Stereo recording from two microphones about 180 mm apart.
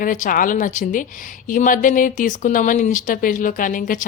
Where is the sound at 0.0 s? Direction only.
50° left (ahead or behind).